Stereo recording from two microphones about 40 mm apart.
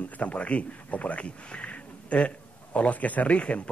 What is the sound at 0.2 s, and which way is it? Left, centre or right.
A man's voice, left.